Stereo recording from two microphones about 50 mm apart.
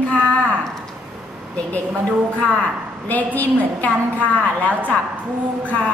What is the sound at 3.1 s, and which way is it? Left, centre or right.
Speech, left.